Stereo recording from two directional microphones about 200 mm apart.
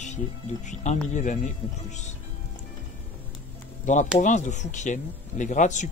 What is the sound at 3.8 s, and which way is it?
Speech, 40° left (ahead or behind).